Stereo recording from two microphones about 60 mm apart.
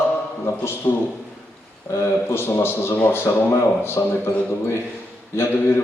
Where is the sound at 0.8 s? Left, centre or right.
Left.